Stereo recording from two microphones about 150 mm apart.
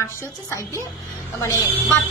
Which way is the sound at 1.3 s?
20° left (ahead or behind).